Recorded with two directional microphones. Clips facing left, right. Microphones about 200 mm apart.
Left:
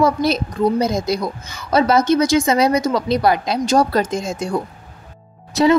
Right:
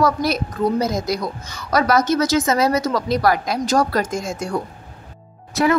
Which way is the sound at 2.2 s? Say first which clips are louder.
Left 2 dB; 15° left (ahead or behind).